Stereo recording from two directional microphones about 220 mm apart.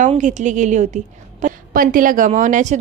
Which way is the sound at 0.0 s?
35° right (ahead or behind).